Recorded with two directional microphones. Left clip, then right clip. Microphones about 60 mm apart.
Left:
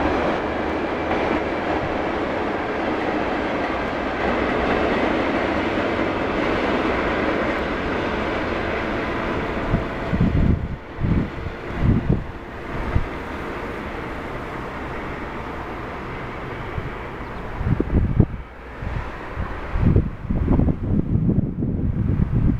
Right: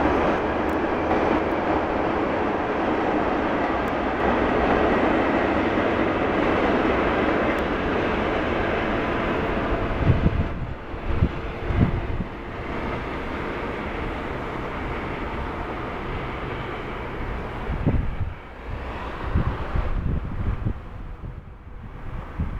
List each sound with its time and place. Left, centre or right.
0.0 s vehicle: left